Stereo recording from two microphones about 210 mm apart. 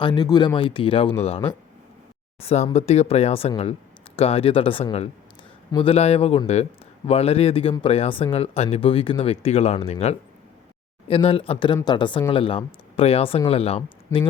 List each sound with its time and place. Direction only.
0.0 s speech: 20° left (ahead or behind)